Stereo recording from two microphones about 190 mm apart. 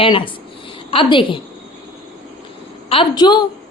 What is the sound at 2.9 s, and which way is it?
Speech, 25° left (ahead or behind).